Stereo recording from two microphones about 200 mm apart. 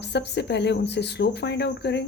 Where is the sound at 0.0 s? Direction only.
60° left (ahead or behind).